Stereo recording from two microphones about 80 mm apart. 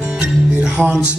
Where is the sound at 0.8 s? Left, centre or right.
Centre.